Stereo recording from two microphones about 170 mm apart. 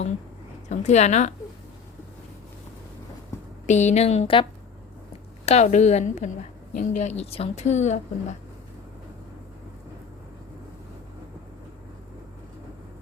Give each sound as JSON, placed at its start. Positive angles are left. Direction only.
{"t": 0.7, "sound": "a woman's voice", "side_deg": 40}
{"t": 3.7, "sound": "speech", "side_deg": 45}
{"t": 5.5, "sound": "a woman's voice", "side_deg": 40}